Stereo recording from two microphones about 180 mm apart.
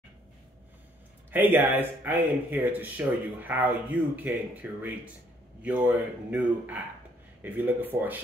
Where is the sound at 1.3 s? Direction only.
10° right (ahead or behind).